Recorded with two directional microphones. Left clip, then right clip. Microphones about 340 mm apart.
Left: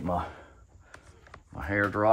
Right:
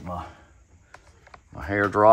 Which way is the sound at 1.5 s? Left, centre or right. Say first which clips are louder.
Right 4 dB; centre.